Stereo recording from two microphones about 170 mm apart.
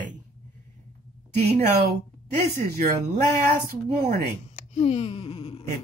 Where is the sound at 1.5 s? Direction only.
75° right (ahead or behind).